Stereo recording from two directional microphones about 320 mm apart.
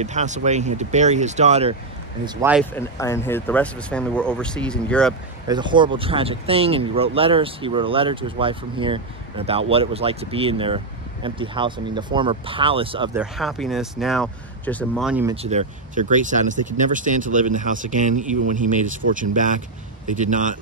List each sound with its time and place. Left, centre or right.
0.0 s speech: right
2.2 s speech: centre
2.7 s speech: centre
5.5 s speech: centre
13.2 s speech: centre
15.3 s speech: centre